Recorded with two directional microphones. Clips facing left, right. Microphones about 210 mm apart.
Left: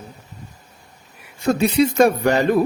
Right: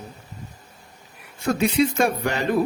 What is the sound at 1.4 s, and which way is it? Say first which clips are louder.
Speech: left 3 dB; 35° left (ahead or behind).